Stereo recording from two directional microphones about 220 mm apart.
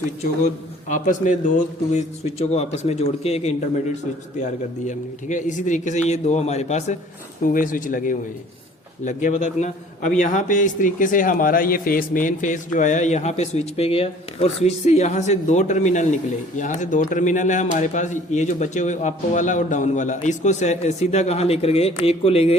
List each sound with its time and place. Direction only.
0.4 s a man's voice: 35° left (ahead or behind)
4.9 s a man's voice: 35° left (ahead or behind)